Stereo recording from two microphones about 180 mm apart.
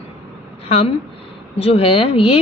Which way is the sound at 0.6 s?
35° left (ahead or behind).